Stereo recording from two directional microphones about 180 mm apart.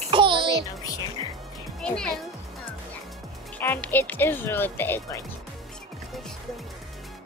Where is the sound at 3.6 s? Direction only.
10° left (ahead or behind).